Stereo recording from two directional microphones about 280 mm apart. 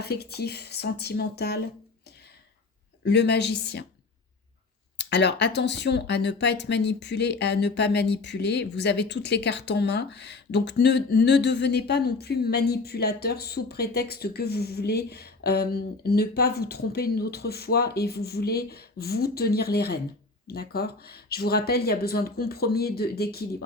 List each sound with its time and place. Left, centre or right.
0.0 s speech: left
3.0 s speech: left
4.9 s speech: left